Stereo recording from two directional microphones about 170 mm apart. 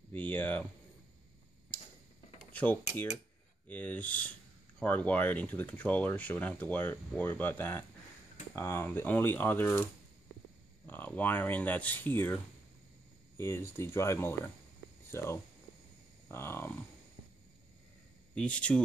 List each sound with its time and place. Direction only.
0.1 s speech: 10° left (ahead or behind)
2.5 s speech: 10° left (ahead or behind)
10.9 s speech: 10° left (ahead or behind)
13.4 s speech: 15° left (ahead or behind)
18.3 s speech: 5° left (ahead or behind)